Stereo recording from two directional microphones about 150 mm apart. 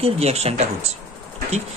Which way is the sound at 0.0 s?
45° right (ahead or behind).